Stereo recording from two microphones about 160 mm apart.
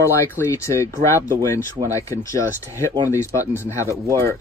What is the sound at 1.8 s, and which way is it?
Speech, 20° left (ahead or behind).